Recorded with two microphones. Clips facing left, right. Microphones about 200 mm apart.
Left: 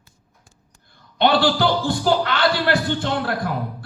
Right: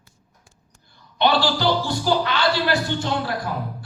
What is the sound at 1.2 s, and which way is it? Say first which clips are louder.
A man's voice: left 2 dB; 50° left (ahead or behind).